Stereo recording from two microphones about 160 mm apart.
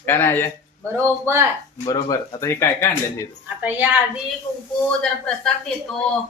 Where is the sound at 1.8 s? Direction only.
25° left (ahead or behind).